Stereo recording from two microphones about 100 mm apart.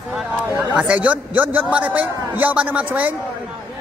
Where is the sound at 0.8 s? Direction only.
10° right (ahead or behind).